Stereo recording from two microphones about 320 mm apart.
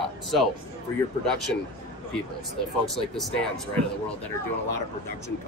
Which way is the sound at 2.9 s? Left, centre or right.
Centre.